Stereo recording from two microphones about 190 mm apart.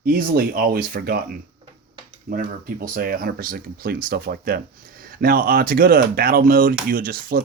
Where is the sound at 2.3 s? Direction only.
50° right (ahead or behind).